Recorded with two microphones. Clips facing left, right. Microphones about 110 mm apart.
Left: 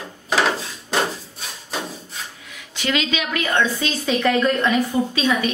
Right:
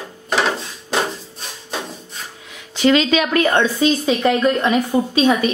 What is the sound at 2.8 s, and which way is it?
Speech, 35° right (ahead or behind).